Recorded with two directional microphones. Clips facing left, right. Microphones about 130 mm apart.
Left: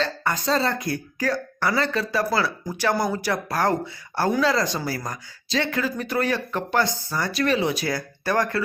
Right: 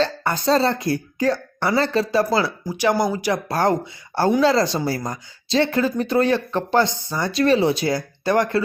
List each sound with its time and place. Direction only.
0.0 s speech: 30° right (ahead or behind)
2.6 s speech: 15° right (ahead or behind)
3.5 s speech: 25° right (ahead or behind)